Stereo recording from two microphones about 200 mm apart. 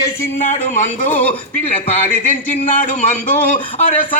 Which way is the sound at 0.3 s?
35° left (ahead or behind).